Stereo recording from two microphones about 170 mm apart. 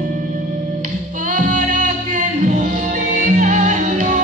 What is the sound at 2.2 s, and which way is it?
Music, 45° right (ahead or behind).